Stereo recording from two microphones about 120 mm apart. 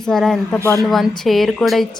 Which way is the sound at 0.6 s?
25° right (ahead or behind).